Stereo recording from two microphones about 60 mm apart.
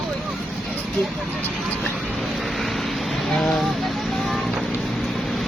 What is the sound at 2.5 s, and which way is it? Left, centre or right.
Vehicle, centre.